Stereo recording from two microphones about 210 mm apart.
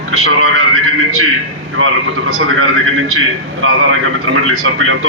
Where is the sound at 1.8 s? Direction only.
75° right (ahead or behind).